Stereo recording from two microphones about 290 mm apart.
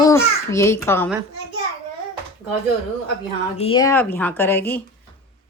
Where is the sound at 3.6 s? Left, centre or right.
Centre.